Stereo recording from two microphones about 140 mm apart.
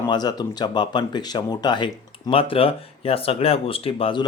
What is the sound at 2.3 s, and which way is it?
Speech, 40° left (ahead or behind).